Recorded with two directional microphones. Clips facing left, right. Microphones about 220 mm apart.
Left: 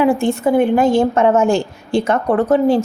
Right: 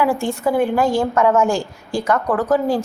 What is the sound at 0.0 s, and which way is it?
A woman's voice, 20° left (ahead or behind).